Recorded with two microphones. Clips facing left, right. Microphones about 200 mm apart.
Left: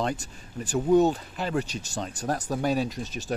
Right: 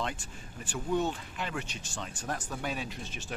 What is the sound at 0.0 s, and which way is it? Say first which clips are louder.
Speech: left 7 dB; 40° left (ahead or behind).